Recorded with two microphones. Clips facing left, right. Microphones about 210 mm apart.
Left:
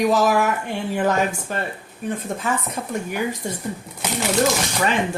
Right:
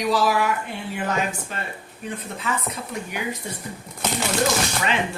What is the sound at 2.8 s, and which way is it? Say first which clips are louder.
Speech: left 5 dB; 50° left (ahead or behind).